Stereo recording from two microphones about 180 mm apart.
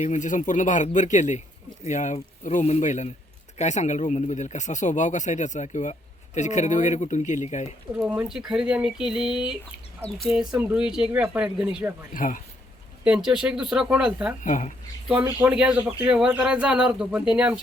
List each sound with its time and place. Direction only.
0.0 s speech: 45° left (ahead or behind)
7.9 s speech: 10° right (ahead or behind)
12.1 s speech: 50° left (ahead or behind)
13.1 s speech: 5° right (ahead or behind)
14.4 s speech: 40° left (ahead or behind)
15.2 s speech: 15° right (ahead or behind)